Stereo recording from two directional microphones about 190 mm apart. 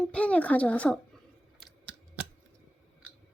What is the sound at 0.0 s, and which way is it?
Speech, 5° left (ahead or behind).